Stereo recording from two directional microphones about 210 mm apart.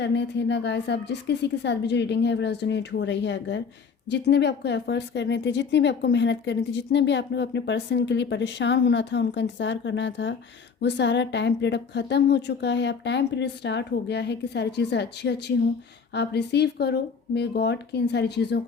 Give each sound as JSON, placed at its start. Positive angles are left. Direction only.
{"t": 0.0, "sound": "speech", "side_deg": 55}